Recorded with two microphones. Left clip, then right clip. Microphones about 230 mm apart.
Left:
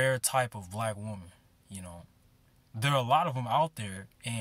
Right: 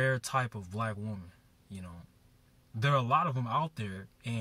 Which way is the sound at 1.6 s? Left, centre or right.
Centre.